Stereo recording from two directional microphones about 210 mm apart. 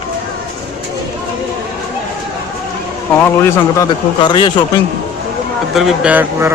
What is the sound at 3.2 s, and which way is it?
Speech, 10° left (ahead or behind).